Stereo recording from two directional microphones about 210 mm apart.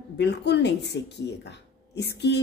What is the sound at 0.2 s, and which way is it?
A woman's voice, 55° left (ahead or behind).